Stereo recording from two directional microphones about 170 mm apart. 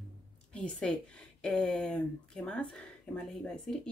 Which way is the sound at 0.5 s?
5° left (ahead or behind).